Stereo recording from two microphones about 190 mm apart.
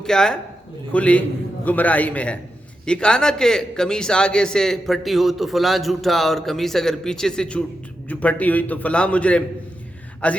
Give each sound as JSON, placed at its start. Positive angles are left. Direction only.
{"t": 0.0, "sound": "a man's voice", "side_deg": 5}